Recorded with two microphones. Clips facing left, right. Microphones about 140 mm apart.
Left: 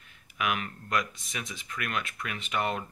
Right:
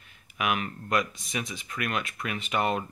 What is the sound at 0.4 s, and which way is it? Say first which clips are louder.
Speech: right 2 dB; 15° right (ahead or behind).